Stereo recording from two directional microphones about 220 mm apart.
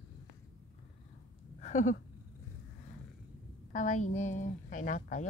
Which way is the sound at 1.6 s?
35° left (ahead or behind).